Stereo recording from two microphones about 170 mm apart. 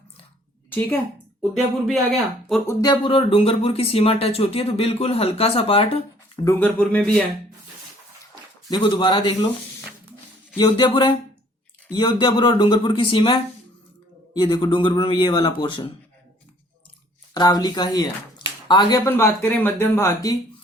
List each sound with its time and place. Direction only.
0.7 s speech: 10° left (ahead or behind)
1.4 s speech: centre (ahead or behind)
2.6 s speech: 25° left (ahead or behind)
6.4 s speech: 15° left (ahead or behind)
8.7 s speech: 25° left (ahead or behind)
10.6 s speech: 30° left (ahead or behind)
17.3 s speech: 25° left (ahead or behind)
19.0 s speech: 15° left (ahead or behind)